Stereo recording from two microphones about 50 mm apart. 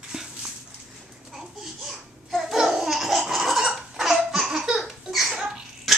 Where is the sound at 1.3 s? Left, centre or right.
Centre.